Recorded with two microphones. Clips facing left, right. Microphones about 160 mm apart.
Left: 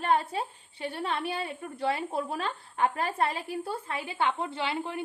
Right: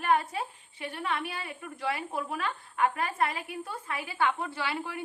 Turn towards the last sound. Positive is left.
turn(degrees=25)  # may be behind; listen again after turning